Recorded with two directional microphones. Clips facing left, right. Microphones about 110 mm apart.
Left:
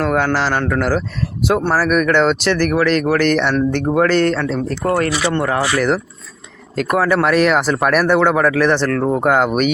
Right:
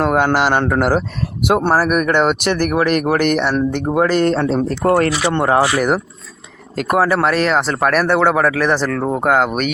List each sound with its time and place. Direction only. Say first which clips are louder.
0.0 s speech: right 2 dB; 20° right (ahead or behind)
4.3 s speech: right 2 dB; 25° right (ahead or behind)
5.2 s speech: right 3 dB; 25° right (ahead or behind)
7.1 s speech: left 2 dB; centre (ahead or behind)